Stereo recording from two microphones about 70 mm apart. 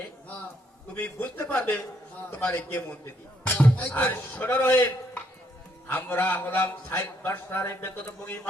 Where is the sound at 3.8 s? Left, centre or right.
Left.